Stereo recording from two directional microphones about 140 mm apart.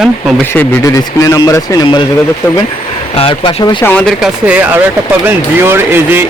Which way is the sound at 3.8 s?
10° left (ahead or behind).